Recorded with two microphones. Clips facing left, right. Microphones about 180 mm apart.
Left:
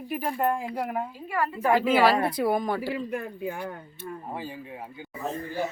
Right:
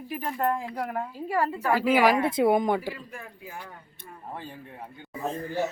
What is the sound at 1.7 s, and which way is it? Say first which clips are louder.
Speech: even; 10° right (ahead or behind).